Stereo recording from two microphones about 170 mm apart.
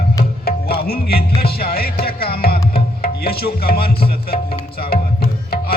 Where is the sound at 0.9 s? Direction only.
65° left (ahead or behind).